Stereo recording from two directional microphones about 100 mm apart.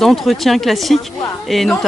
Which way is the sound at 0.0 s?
Centre (ahead or behind).